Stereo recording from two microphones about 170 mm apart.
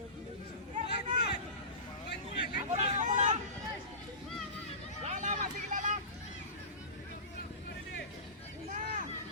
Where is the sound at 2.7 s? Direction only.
45° right (ahead or behind).